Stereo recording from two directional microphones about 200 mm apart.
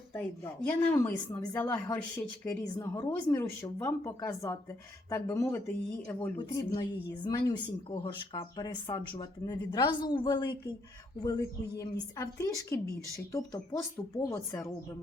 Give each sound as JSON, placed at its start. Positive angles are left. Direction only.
{"t": 0.2, "sound": "speech", "side_deg": 5}